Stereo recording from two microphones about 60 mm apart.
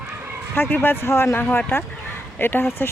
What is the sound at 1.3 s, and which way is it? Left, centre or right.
Speech, left.